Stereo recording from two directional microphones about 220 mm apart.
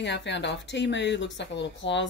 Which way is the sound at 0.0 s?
55° left (ahead or behind).